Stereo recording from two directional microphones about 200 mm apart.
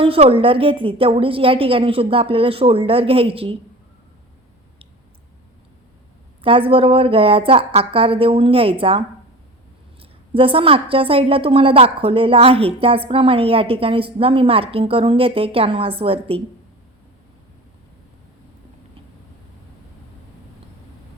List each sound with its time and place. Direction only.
0.0 s a woman's voice: 30° right (ahead or behind)
6.4 s a woman's voice: 25° right (ahead or behind)